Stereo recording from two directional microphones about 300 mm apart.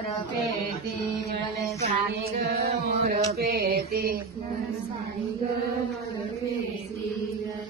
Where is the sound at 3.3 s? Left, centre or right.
Right.